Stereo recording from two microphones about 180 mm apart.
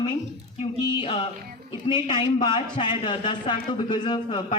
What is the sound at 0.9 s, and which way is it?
Speech, 25° left (ahead or behind).